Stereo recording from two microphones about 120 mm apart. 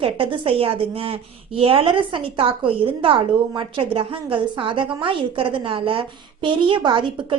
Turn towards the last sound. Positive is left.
turn(degrees=-40)  # may be behind; listen again after turning